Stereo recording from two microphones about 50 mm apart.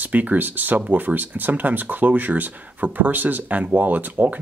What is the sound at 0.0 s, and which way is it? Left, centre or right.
Speech, right.